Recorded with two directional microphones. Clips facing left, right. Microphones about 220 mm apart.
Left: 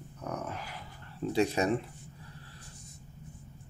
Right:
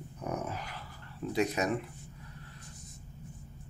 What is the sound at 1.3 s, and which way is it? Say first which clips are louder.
Speech: left 2 dB; 30° left (ahead or behind).